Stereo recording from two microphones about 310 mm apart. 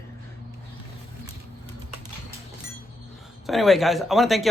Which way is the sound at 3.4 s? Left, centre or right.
Centre.